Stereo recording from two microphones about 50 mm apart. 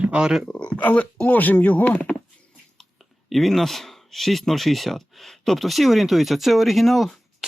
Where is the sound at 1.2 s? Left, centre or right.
Left.